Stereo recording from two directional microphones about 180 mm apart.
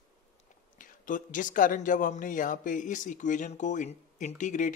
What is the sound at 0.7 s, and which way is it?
Speech, 45° left (ahead or behind).